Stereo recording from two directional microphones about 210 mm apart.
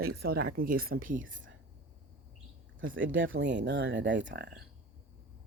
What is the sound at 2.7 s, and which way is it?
Speech, 65° right (ahead or behind).